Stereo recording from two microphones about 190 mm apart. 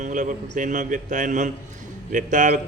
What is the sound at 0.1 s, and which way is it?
A man's voice, 40° right (ahead or behind).